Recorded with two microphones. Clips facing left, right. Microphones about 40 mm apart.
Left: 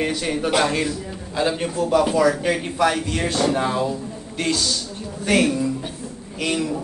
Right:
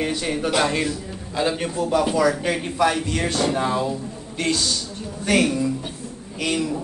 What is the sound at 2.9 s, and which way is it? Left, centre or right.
Speech, centre.